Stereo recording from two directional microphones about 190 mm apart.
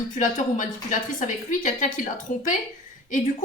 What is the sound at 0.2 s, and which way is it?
Speech, 45° left (ahead or behind).